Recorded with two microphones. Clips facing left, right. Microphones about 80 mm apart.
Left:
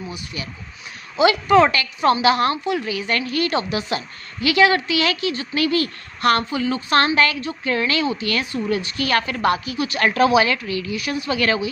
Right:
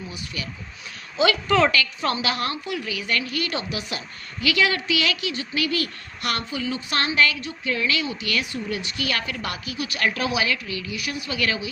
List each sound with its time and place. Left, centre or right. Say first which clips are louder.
1.2 s a woman's voice: left 5 dB; left